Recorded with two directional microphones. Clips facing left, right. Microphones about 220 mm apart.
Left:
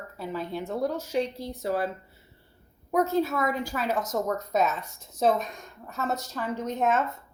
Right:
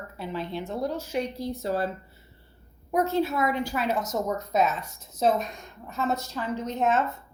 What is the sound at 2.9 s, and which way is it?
Speech, 45° left (ahead or behind).